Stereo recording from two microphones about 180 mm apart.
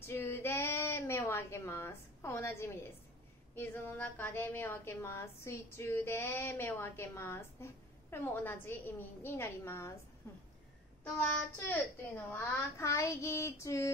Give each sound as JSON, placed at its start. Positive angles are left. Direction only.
{"t": 0.0, "sound": "a sound", "side_deg": 10}
{"t": 3.5, "sound": "a woman's voice", "side_deg": 10}
{"t": 11.2, "sound": "a woman's voice", "side_deg": 10}